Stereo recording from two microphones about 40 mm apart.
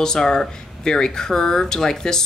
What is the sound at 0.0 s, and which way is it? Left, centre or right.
Speech, centre.